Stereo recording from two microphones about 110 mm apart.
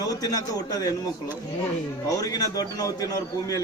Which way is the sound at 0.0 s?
35° left (ahead or behind).